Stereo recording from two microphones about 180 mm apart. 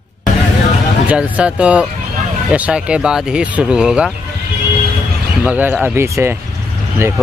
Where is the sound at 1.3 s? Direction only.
5° right (ahead or behind).